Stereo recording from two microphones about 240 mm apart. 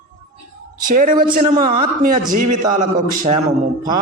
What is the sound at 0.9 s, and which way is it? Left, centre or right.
A man's voice, right.